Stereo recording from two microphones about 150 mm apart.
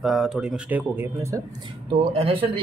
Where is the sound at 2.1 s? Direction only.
40° right (ahead or behind).